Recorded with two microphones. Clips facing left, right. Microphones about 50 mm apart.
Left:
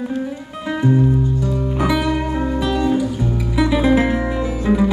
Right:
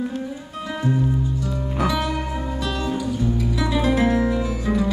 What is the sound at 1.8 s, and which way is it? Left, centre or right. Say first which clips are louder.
Music: left 3 dB; centre.